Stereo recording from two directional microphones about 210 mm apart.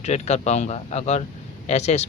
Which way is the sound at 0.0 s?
30° left (ahead or behind).